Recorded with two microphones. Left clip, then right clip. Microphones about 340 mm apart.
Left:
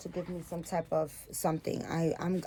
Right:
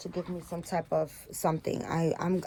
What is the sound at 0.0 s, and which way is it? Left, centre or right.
Speech, right.